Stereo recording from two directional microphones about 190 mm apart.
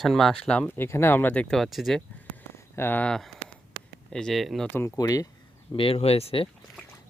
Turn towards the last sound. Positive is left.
turn(degrees=30)  # may be behind; listen again after turning